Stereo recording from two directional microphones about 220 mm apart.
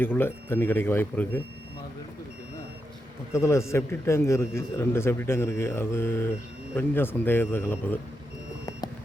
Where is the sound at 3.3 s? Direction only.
10° left (ahead or behind).